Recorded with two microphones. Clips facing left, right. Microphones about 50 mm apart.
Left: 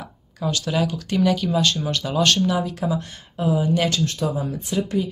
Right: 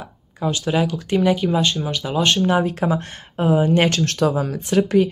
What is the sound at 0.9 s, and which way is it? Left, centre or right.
Speech, right.